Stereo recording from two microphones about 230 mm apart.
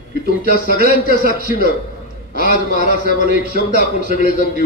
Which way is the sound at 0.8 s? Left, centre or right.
Left.